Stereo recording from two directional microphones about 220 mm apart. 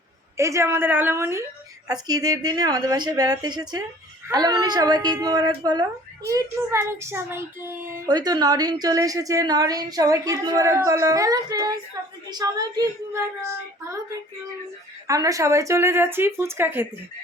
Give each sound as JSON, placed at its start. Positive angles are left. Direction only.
{"t": 0.3, "sound": "a woman's voice", "side_deg": -15}
{"t": 15.0, "sound": "a woman's voice", "side_deg": -15}